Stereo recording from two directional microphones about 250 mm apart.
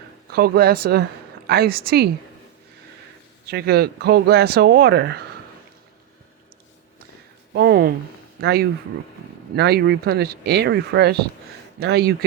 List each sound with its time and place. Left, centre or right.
0.3 s speech: right
3.5 s speech: right
7.5 s a sound: right
8.4 s speech: right